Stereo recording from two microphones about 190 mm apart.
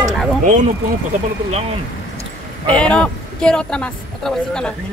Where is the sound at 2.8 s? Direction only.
5° left (ahead or behind).